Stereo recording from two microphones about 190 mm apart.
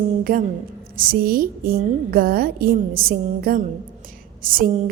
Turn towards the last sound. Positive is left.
turn(degrees=-50)  # may be behind; listen again after turning